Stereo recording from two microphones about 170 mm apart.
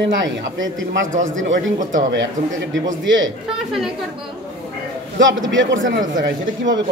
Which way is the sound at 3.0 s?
90° right.